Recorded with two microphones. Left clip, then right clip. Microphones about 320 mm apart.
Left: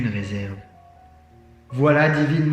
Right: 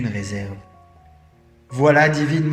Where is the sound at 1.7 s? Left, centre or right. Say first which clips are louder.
Right 3 dB; right.